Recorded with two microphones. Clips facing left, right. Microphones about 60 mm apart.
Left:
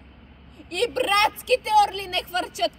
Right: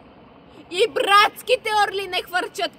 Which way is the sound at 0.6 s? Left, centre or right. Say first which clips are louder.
Right 5 dB; right.